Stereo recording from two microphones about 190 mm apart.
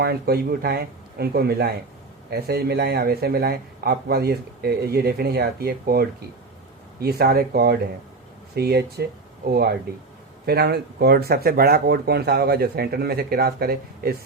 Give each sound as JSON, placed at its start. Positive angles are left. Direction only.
{"t": 0.0, "sound": "speech", "side_deg": -55}